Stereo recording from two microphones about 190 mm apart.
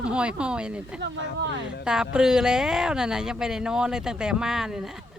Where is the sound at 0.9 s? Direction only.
65° right (ahead or behind).